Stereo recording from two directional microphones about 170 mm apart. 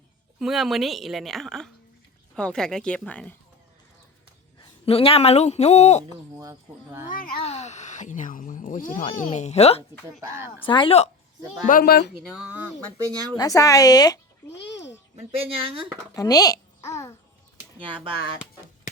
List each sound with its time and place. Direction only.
0.3 s a woman's voice: centre (ahead or behind)
4.6 s speech: 35° left (ahead or behind)
6.3 s speech: 15° right (ahead or behind)
7.1 s speech: 55° left (ahead or behind)
7.3 s speech: 40° left (ahead or behind)
10.2 s speech: 15° right (ahead or behind)
10.7 s speech: 30° left (ahead or behind)
11.6 s speech: 55° left (ahead or behind)
13.3 s speech: 20° left (ahead or behind)
15.1 s speech: 35° right (ahead or behind)
16.1 s a child's voice: 20° left (ahead or behind)